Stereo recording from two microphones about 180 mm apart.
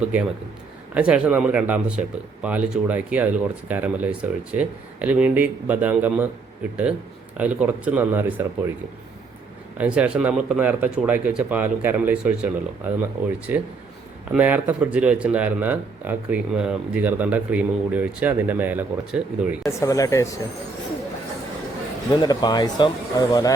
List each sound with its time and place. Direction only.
0.0 s speech: 5° right (ahead or behind)
7.3 s speech: 10° right (ahead or behind)
9.7 s speech: 10° right (ahead or behind)
19.6 s speech: 15° left (ahead or behind)
22.1 s speech: 20° left (ahead or behind)